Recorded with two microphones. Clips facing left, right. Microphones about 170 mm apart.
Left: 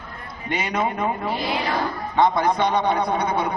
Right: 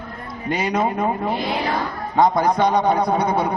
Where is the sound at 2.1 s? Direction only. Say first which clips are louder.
Right 2 dB; 40° right (ahead or behind).